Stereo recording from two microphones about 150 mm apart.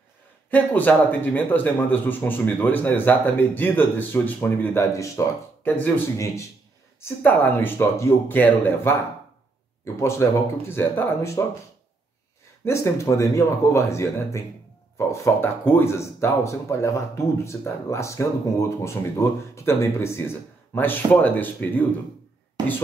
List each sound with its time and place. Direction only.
0.5 s speech: 10° left (ahead or behind)
9.9 s speech: 20° left (ahead or behind)
12.6 s speech: 20° left (ahead or behind)